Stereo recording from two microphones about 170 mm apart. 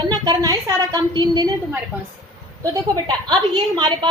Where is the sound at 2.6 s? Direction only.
25° right (ahead or behind).